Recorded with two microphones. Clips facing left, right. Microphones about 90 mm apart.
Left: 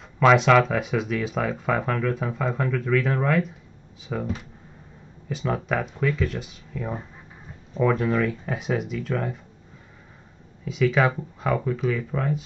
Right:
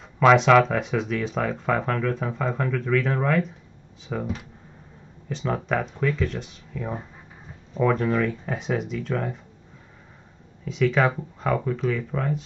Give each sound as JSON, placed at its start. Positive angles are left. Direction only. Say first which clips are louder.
{"t": 0.0, "sound": "speech", "louder": "right 1 dB", "side_deg": 0}
{"t": 10.6, "sound": "speech", "louder": "even", "side_deg": 5}